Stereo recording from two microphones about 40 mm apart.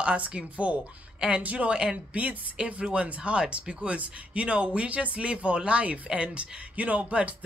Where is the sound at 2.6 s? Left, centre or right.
Right.